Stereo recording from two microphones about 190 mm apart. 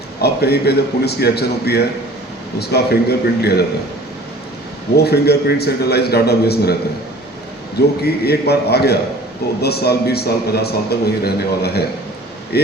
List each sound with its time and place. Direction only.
0.2 s a man's voice: 60° left (ahead or behind)
4.9 s a man's voice: 60° left (ahead or behind)
8.0 s a man's voice: 55° left (ahead or behind)